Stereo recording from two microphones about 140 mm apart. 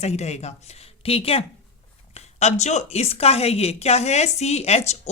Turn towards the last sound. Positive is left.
turn(degrees=50)  # may be behind; listen again after turning